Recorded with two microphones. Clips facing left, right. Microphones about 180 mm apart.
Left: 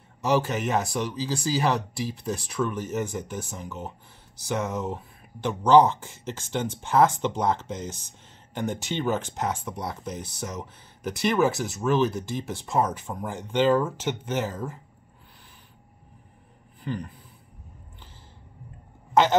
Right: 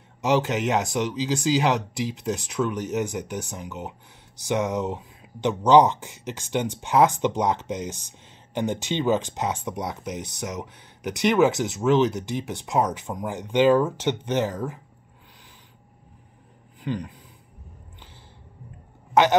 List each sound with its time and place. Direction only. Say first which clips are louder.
0.2 s speech: right 2 dB; 20° right (ahead or behind)
16.8 s speech: right 3 dB; 15° right (ahead or behind)